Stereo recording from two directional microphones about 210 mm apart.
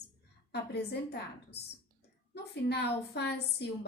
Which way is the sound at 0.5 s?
50° left (ahead or behind).